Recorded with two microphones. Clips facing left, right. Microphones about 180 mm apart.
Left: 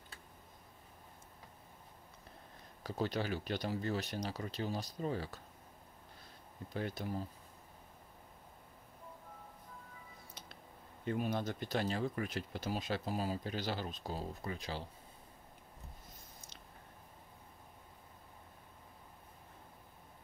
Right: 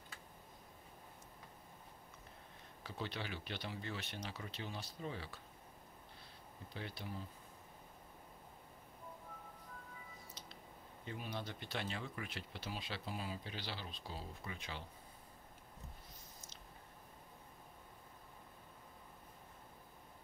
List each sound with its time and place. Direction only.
2.8 s speech: 40° left (ahead or behind)
6.7 s speech: 45° left (ahead or behind)
11.1 s speech: 50° left (ahead or behind)